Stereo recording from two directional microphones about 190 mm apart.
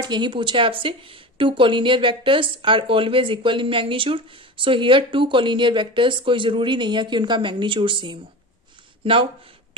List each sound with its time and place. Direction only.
0.0 s speech: 25° right (ahead or behind)